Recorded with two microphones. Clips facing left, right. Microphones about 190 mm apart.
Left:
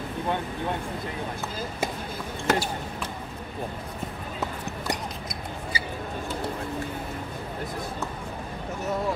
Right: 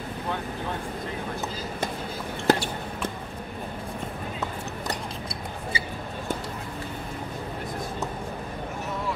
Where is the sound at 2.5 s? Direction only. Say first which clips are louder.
Right 3 dB; 35° right (ahead or behind).